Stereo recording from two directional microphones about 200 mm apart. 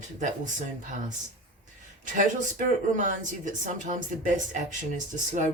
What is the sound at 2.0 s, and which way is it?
Speech, 40° right (ahead or behind).